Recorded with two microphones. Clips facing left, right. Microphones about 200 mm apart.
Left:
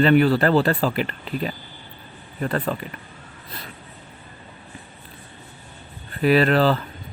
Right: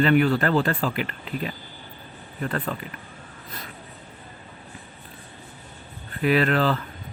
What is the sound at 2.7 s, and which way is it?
Speech, 35° left (ahead or behind).